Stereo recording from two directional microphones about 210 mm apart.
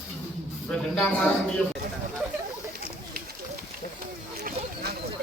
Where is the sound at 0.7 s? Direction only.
5° left (ahead or behind).